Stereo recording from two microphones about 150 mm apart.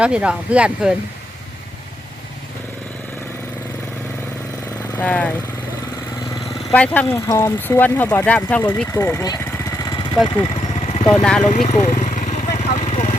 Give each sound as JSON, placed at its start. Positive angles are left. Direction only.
{"t": 0.0, "sound": "speech", "side_deg": -5}
{"t": 4.9, "sound": "speech", "side_deg": 10}
{"t": 6.7, "sound": "speech", "side_deg": 10}
{"t": 10.2, "sound": "vehicle", "side_deg": 35}
{"t": 10.8, "sound": "vehicle", "side_deg": 45}
{"t": 11.1, "sound": "speech", "side_deg": 5}
{"t": 11.4, "sound": "speech", "side_deg": 50}
{"t": 11.9, "sound": "vehicle", "side_deg": 55}